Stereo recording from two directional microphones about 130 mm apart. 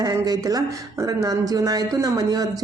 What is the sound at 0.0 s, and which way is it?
A man's voice, 30° right (ahead or behind).